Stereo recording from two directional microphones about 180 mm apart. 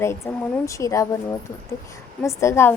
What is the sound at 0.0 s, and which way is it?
A woman's voice, 15° left (ahead or behind).